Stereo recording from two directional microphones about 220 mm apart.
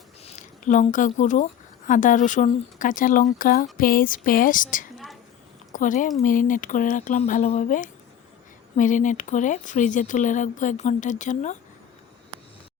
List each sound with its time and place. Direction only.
0.2 s speech: 30° left (ahead or behind)